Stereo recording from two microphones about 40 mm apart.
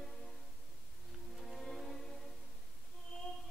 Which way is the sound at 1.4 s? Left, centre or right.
Centre.